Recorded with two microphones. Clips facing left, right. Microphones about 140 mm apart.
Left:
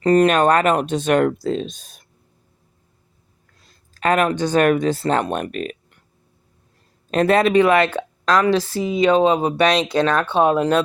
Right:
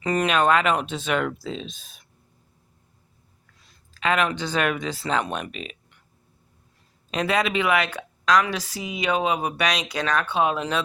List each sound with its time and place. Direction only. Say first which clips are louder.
0.0 s speech: left 7 dB; 40° left (ahead or behind)
4.0 s speech: left 6 dB; 45° left (ahead or behind)
7.1 s speech: left 8 dB; 45° left (ahead or behind)
8.2 s a woman's voice: left 5 dB; 35° left (ahead or behind)
10.4 s speech: left 11 dB; 50° left (ahead or behind)